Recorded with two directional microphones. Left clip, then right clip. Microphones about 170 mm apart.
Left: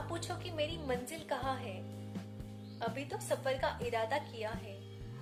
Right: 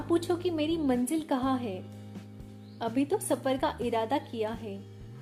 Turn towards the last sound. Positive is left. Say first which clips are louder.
# right 6 dB
turn(degrees=-30)  # may be behind; listen again after turning